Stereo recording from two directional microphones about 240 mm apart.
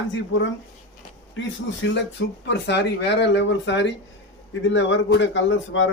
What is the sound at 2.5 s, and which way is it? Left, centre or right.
Speech, left.